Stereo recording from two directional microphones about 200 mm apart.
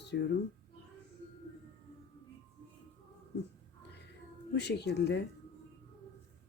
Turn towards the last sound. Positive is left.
turn(degrees=55)  # may be behind; listen again after turning